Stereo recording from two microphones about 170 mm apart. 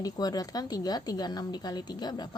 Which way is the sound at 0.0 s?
20° left (ahead or behind).